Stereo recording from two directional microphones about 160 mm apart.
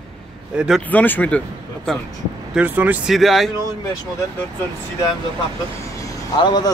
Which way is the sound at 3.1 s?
Centre (ahead or behind).